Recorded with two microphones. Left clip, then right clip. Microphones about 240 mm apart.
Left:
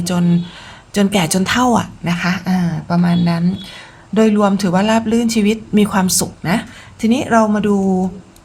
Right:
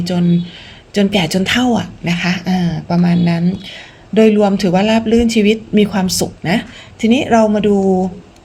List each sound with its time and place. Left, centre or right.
0.0 s speech: left
7.8 s speech: left